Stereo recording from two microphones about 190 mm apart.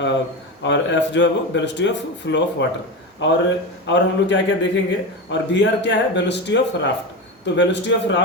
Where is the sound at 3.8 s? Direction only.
70° left (ahead or behind).